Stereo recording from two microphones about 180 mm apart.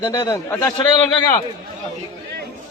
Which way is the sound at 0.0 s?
20° left (ahead or behind).